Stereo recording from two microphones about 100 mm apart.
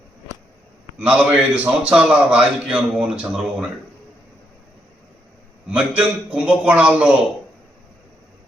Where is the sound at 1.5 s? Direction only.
15° right (ahead or behind).